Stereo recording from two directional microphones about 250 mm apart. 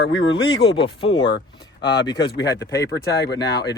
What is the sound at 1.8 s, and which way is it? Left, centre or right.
Speech, left.